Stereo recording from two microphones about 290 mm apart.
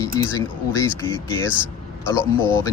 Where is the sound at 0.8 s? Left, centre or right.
Centre.